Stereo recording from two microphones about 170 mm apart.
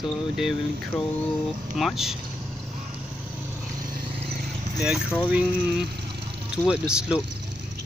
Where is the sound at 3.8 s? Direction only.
70° right (ahead or behind).